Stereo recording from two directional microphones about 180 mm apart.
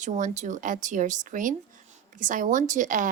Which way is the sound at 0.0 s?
45° right (ahead or behind).